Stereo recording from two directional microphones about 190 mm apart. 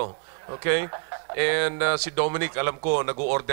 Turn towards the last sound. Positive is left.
turn(degrees=-15)  # may be behind; listen again after turning